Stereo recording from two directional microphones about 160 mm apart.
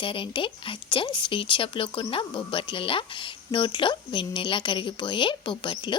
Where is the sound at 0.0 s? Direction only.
30° left (ahead or behind).